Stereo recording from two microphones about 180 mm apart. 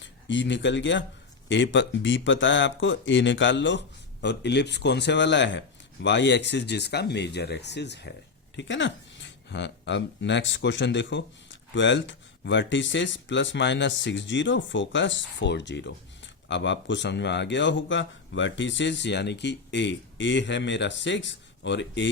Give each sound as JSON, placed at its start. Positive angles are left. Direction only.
{"t": 0.0, "sound": "speech", "side_deg": 90}
{"t": 8.5, "sound": "speech", "side_deg": 90}